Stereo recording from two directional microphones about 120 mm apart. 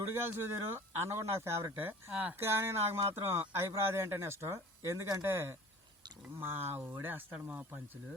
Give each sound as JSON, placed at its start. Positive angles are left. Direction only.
{"t": 0.1, "sound": "speech", "side_deg": -20}